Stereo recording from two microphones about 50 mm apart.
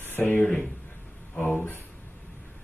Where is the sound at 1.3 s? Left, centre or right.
Left.